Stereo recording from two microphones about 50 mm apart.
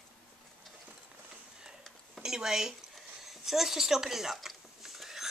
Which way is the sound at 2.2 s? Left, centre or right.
Centre.